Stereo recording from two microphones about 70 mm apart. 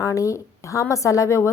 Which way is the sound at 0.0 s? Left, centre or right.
Left.